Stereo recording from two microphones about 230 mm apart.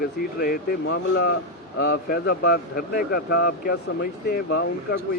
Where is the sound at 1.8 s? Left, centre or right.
Left.